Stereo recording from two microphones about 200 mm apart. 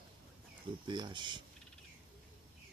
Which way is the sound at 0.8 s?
25° right (ahead or behind).